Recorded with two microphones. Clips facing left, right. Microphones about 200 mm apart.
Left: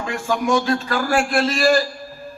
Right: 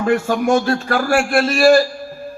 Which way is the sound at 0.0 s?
50° right (ahead or behind).